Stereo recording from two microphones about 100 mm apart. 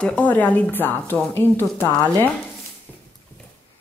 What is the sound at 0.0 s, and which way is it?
A woman's voice, 15° left (ahead or behind).